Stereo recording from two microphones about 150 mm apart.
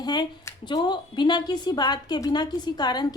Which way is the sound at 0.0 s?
30° left (ahead or behind).